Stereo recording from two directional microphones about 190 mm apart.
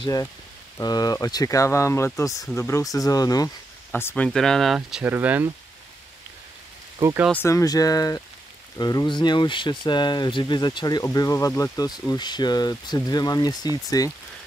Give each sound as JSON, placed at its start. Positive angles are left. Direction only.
{"t": 0.0, "sound": "speech", "side_deg": 20}
{"t": 3.9, "sound": "speech", "side_deg": 10}
{"t": 7.0, "sound": "speech", "side_deg": -15}
{"t": 7.4, "sound": "speech", "side_deg": 15}